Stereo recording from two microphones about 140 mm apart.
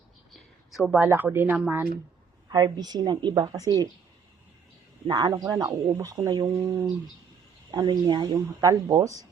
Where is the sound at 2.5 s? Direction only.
30° right (ahead or behind).